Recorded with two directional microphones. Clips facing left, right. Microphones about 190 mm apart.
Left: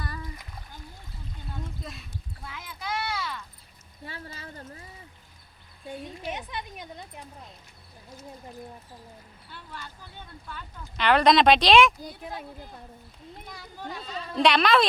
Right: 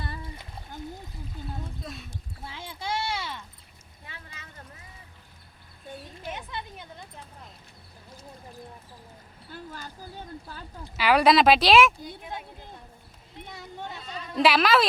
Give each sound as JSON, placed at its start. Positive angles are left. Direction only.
{"t": 0.0, "sound": "splash", "side_deg": -30}
{"t": 1.8, "sound": "a sound", "side_deg": 0}
{"t": 2.4, "sound": "a sound", "side_deg": -30}
{"t": 4.0, "sound": "a sound", "side_deg": 35}
{"t": 6.2, "sound": "a woman's voice", "side_deg": 15}
{"t": 9.5, "sound": "speech", "side_deg": -40}
{"t": 10.9, "sound": "speech", "side_deg": -5}
{"t": 13.5, "sound": "speech", "side_deg": -25}
{"t": 14.3, "sound": "speech", "side_deg": -5}